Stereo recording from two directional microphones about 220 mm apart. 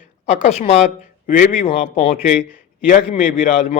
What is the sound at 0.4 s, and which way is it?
A man's voice, 30° left (ahead or behind).